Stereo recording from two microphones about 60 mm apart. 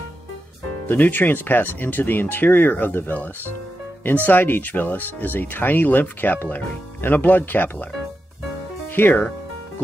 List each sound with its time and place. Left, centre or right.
0.8 s speech: left
8.9 s speech: left